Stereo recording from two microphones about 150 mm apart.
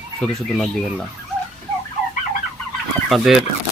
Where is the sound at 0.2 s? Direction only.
5° left (ahead or behind).